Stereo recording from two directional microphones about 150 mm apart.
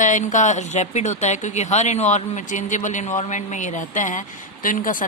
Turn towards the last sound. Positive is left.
turn(degrees=65)  # may be behind; listen again after turning